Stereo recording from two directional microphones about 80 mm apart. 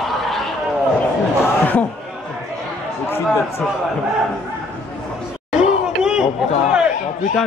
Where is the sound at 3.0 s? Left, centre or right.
Left.